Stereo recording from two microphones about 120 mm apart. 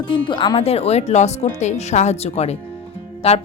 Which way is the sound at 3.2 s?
55° left (ahead or behind).